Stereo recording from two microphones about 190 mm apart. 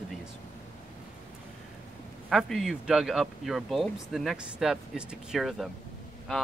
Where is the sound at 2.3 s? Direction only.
Centre (ahead or behind).